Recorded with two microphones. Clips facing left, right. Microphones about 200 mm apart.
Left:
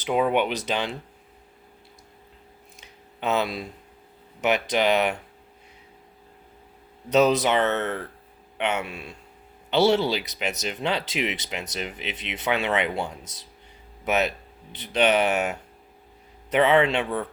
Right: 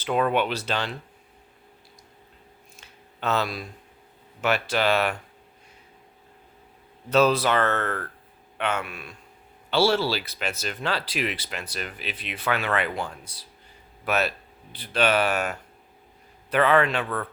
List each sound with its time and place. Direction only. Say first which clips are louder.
0.0 s speech: left 1 dB; 15° left (ahead or behind)
2.8 s a sound: left 1 dB; 15° left (ahead or behind)
4.4 s speech: left 2 dB; 20° left (ahead or behind)
7.1 s speech: left 1 dB; 20° left (ahead or behind)